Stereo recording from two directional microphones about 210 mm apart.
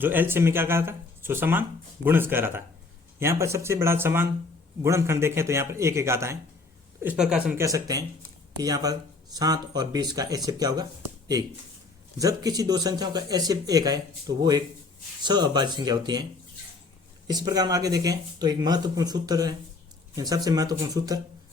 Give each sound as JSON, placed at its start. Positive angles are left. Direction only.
{"t": 0.0, "sound": "speech", "side_deg": -10}
{"t": 12.2, "sound": "speech", "side_deg": -15}
{"t": 17.2, "sound": "speech", "side_deg": -20}